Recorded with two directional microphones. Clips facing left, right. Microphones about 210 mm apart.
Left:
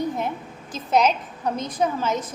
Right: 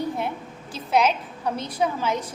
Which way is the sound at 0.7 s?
45° left (ahead or behind).